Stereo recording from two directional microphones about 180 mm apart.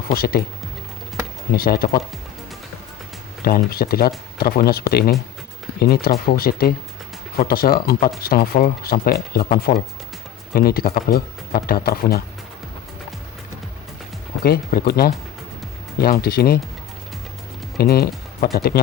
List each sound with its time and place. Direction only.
0.1 s speech: 55° left (ahead or behind)
1.5 s speech: 55° left (ahead or behind)
3.4 s speech: 60° left (ahead or behind)
14.4 s speech: 55° left (ahead or behind)
17.7 s speech: 60° left (ahead or behind)